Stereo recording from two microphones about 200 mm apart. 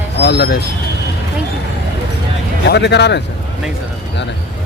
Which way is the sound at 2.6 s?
60° left (ahead or behind).